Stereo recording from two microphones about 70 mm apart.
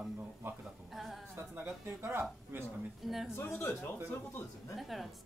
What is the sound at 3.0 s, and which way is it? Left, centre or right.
Speech, centre.